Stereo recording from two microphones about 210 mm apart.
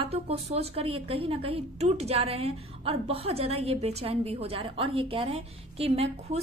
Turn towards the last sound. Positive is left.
turn(degrees=-30)  # may be behind; listen again after turning